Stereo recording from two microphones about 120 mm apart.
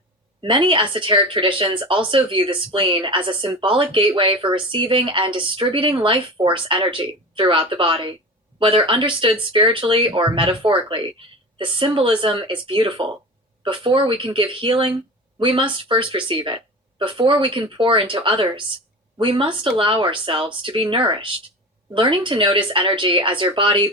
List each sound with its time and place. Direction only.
0.4 s a woman's voice: 45° right (ahead or behind)